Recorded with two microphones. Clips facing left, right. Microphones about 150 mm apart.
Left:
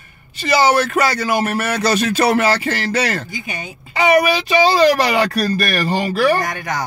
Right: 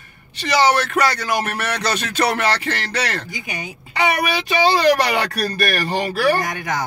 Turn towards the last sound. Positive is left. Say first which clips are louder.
# left 1 dB
turn(degrees=-20)  # may be behind; listen again after turning